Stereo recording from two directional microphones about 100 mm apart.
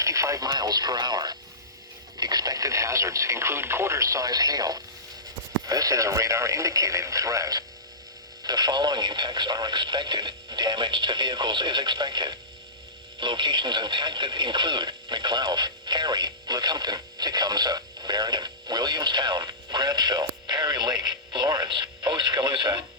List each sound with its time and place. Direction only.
0.0 s radio: 35° right (ahead or behind)
0.5 s speech: 40° right (ahead or behind)